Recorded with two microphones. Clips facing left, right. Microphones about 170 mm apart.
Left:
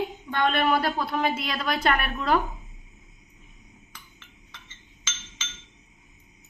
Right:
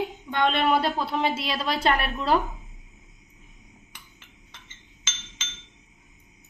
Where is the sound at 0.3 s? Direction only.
20° right (ahead or behind).